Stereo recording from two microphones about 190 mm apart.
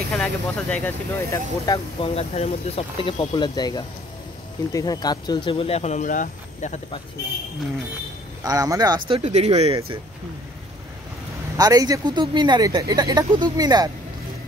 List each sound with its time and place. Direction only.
0.1 s speech: 5° left (ahead or behind)
1.7 s speech: 30° left (ahead or behind)
8.5 s speech: 20° right (ahead or behind)
11.5 s speech: 20° right (ahead or behind)